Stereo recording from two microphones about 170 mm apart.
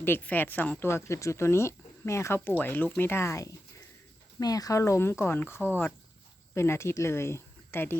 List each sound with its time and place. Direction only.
0.0 s speech: 10° left (ahead or behind)